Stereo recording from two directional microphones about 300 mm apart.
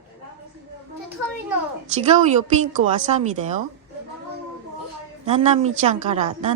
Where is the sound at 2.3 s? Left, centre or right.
Right.